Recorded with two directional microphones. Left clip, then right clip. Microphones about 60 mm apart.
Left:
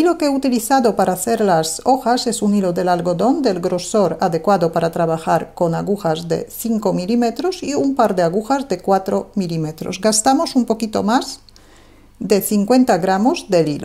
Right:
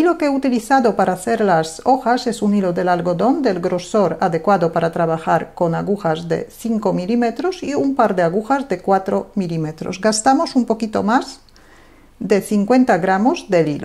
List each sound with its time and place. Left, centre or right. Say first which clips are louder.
0.0 s speech: even; left
12.3 s speech: even; left